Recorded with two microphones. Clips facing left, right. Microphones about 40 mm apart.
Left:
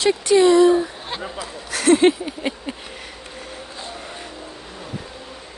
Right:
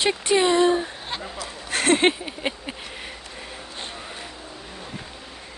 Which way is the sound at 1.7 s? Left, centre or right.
Right.